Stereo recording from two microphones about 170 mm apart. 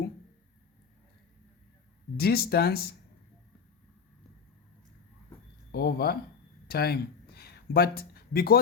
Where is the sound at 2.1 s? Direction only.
65° left (ahead or behind).